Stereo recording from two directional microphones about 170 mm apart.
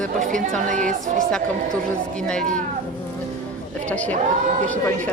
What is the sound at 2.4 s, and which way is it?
Speech, 50° right (ahead or behind).